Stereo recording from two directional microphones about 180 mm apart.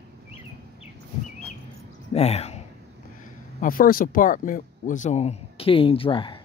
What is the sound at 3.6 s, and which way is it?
Speech, 50° left (ahead or behind).